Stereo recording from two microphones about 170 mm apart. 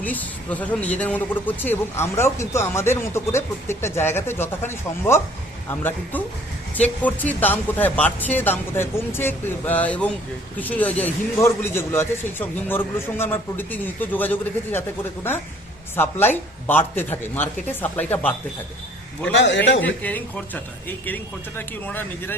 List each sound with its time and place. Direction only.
0.0 s a man's voice: 10° left (ahead or behind)
6.7 s a man's voice: 10° left (ahead or behind)
19.4 s a man's voice: 90° left
19.8 s a man's voice: 10° left (ahead or behind)